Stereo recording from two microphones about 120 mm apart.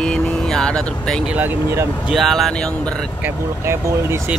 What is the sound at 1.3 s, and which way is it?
Speech, 15° right (ahead or behind).